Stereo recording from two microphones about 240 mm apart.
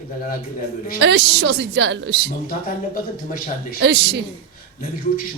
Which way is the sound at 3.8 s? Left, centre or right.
Right.